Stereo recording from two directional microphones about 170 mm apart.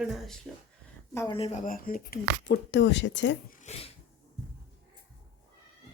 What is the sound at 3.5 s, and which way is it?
Dog, 40° left (ahead or behind).